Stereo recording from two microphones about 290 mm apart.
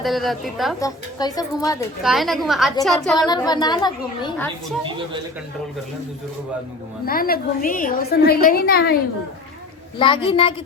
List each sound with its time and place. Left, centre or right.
0.0 s a woman's voice: centre
0.8 s a woman's voice: centre
2.0 s a woman's voice: centre
3.2 s a woman's voice: centre
7.0 s a woman's voice: left
10.0 s a woman's voice: centre